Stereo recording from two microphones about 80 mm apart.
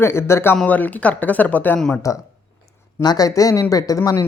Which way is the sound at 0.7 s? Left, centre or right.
Left.